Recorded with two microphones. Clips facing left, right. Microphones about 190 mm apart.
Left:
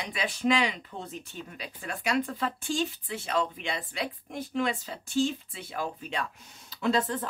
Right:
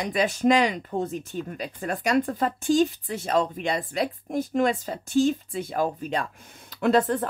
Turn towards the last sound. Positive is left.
turn(degrees=-55)  # may be behind; listen again after turning